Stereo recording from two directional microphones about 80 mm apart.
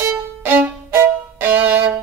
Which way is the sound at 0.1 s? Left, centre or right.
Right.